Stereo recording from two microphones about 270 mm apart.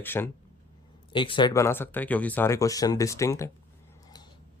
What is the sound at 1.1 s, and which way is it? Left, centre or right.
Speech, centre.